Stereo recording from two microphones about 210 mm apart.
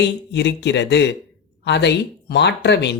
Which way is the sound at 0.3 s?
55° left (ahead or behind).